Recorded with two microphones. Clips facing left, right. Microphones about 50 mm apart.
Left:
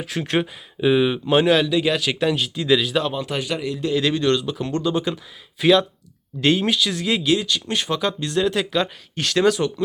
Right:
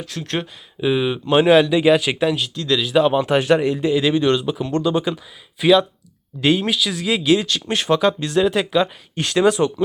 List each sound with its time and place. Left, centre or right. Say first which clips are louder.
0.3 s speech: left 3 dB; centre
1.4 s speech: right 5 dB; centre
3.1 s speech: right 8 dB; right
3.8 s speech: right 3 dB; centre
7.3 s speech: right 3 dB; centre
9.5 s speech: right 3 dB; right